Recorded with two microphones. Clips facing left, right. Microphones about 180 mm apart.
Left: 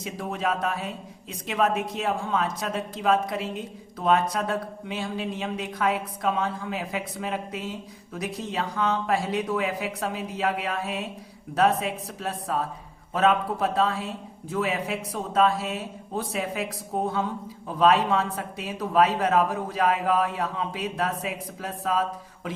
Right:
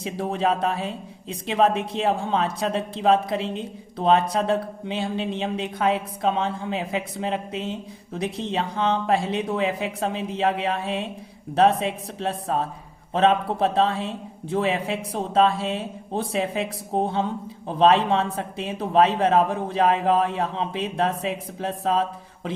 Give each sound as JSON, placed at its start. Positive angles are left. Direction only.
{"t": 0.0, "sound": "a woman's voice", "side_deg": -30}